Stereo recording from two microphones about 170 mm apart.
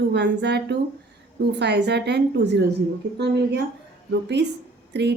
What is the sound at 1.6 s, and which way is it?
A woman's voice, 80° right.